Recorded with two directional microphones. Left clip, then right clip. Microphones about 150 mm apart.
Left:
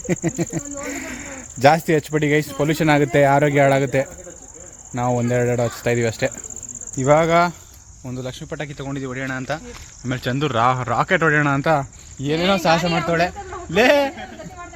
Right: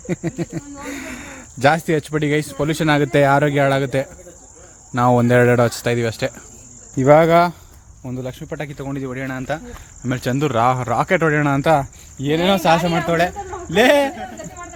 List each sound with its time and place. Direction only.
0.1 s speech: centre (ahead or behind)
0.8 s speech: 15° right (ahead or behind)
4.9 s speech: 40° right (ahead or behind)
5.8 s speech: 15° right (ahead or behind)
6.9 s speech: 30° right (ahead or behind)
8.0 s speech: 10° right (ahead or behind)
10.0 s speech: 20° right (ahead or behind)